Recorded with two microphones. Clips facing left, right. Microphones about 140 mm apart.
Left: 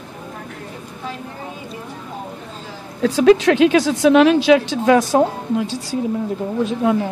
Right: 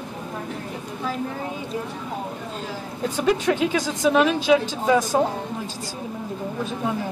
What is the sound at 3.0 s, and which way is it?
Speech, 90° left.